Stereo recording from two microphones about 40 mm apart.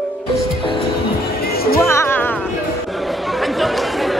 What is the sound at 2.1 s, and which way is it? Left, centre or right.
Music, left.